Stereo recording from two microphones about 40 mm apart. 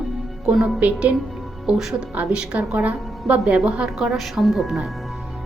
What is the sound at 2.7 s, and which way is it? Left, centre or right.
Speech, right.